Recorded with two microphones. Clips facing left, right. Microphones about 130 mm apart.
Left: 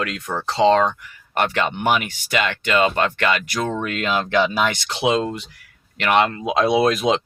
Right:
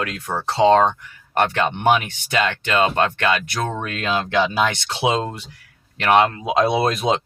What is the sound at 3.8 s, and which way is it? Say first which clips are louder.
Speech: left 1 dB; 30° right (ahead or behind).